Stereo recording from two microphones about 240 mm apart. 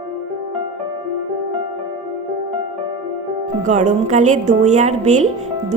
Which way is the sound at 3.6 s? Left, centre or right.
Right.